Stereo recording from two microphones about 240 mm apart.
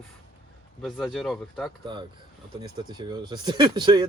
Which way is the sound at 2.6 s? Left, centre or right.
Centre.